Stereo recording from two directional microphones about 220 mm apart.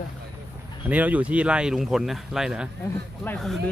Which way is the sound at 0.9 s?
5° right (ahead or behind).